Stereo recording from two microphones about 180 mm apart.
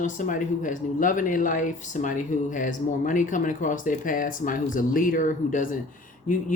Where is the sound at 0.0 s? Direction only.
45° left (ahead or behind).